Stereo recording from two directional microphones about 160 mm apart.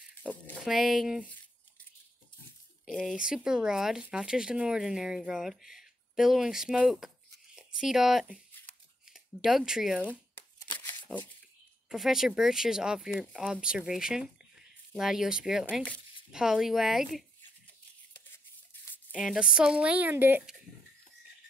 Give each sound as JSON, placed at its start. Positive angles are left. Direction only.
{"t": 0.6, "sound": "speech", "side_deg": 0}
{"t": 2.8, "sound": "speech", "side_deg": 0}
{"t": 10.8, "sound": "a sound", "side_deg": 15}
{"t": 11.9, "sound": "speech", "side_deg": -5}
{"t": 15.7, "sound": "speech", "side_deg": 10}
{"t": 16.3, "sound": "speech", "side_deg": -5}
{"t": 18.2, "sound": "toothbrush", "side_deg": 15}
{"t": 19.1, "sound": "speech", "side_deg": -5}